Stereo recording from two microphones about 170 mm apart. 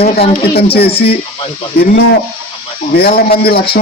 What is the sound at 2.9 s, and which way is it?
Speech, 65° left (ahead or behind).